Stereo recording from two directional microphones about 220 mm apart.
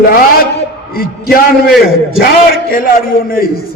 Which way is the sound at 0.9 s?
40° left (ahead or behind).